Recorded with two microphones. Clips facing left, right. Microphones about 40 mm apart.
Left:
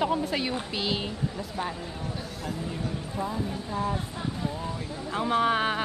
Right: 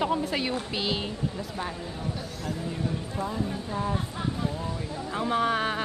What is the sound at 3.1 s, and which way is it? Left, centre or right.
Speech, centre.